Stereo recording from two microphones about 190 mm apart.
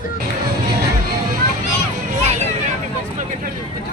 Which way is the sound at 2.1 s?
35° right (ahead or behind).